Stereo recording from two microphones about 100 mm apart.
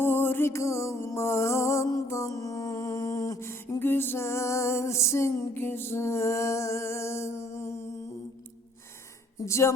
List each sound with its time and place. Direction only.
0.0 s music: 20° left (ahead or behind); by 3.3 s 40° left (ahead or behind)
3.4 s music: 25° left (ahead or behind)
9.5 s a woman's voice: 30° left (ahead or behind)